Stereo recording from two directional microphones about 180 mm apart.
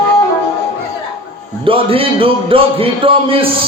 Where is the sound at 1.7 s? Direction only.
30° right (ahead or behind).